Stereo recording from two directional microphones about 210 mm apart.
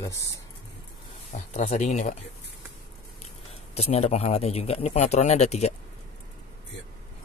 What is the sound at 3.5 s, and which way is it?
Speech, 30° left (ahead or behind).